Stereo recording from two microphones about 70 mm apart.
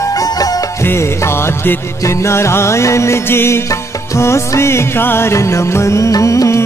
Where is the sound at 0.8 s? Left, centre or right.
Left.